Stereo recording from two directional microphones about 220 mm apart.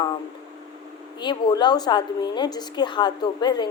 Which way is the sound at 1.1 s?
20° left (ahead or behind).